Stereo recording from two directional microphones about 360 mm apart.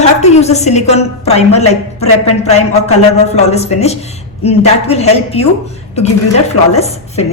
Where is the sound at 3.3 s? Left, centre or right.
Centre.